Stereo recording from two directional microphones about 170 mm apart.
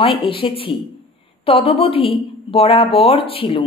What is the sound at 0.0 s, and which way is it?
Speech, 30° left (ahead or behind).